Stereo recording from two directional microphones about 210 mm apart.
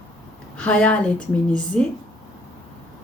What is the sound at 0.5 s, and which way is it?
A woman's voice, 5° left (ahead or behind).